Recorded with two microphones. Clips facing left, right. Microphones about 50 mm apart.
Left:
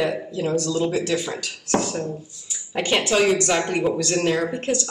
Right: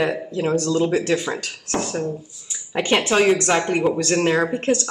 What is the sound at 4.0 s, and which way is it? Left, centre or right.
Speech, right.